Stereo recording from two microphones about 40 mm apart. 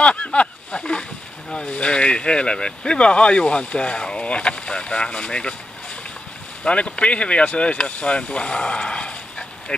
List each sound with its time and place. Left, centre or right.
0.0 s a sound: left
1.5 s speech: left
6.6 s speech: left